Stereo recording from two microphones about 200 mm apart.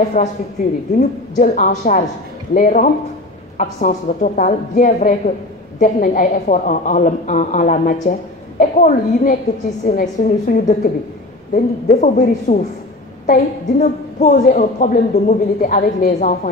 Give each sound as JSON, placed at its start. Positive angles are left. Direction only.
{"t": 0.2, "sound": "a woman's voice", "side_deg": 35}